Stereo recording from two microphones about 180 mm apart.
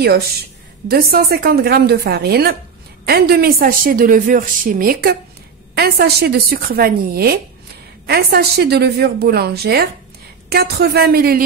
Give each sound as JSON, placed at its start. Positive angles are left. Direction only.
{"t": 0.0, "sound": "a woman's voice", "side_deg": -60}
{"t": 5.8, "sound": "a woman's voice", "side_deg": -60}